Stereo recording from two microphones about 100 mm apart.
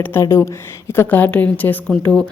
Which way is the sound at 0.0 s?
25° left (ahead or behind).